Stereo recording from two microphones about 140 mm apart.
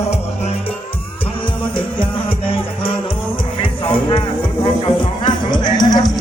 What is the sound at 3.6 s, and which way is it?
Music, 35° left (ahead or behind).